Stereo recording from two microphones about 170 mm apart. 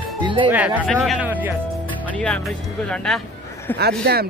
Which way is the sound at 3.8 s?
70° right (ahead or behind).